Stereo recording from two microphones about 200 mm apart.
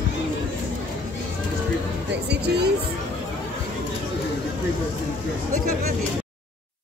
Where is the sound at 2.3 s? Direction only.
55° right (ahead or behind).